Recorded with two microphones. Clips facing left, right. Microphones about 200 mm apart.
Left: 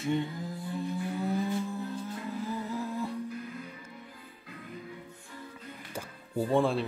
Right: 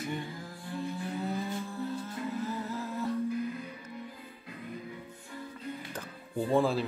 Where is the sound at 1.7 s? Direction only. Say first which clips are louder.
Even; 15° left (ahead or behind).